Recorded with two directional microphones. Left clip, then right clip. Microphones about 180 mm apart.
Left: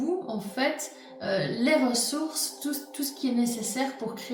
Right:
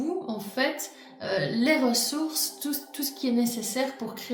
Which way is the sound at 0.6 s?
50° right (ahead or behind).